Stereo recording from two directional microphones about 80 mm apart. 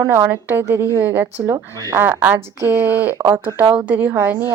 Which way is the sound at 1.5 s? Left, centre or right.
Right.